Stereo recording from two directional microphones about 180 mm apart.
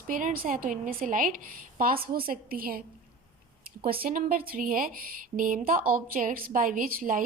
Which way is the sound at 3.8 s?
55° right (ahead or behind).